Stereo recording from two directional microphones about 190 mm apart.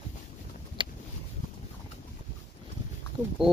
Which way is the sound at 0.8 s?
25° right (ahead or behind).